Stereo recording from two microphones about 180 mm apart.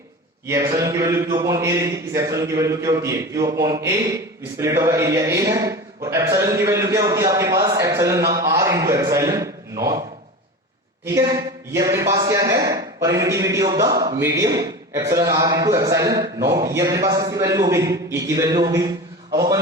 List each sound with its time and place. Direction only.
0.4 s a man's voice: 20° right (ahead or behind)
11.0 s a man's voice: 15° right (ahead or behind)